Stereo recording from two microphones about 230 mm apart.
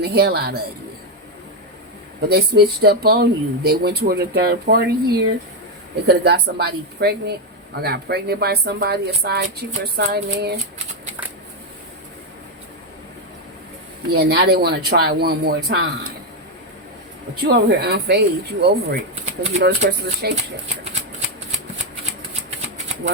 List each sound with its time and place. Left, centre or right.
0.0 s speech: right
2.2 s speech: right
14.1 s speech: right
17.5 s speech: right